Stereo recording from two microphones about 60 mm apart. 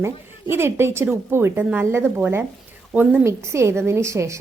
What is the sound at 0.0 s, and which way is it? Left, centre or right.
A woman's voice, right.